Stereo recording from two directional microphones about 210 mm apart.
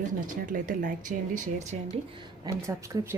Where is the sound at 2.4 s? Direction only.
15° right (ahead or behind).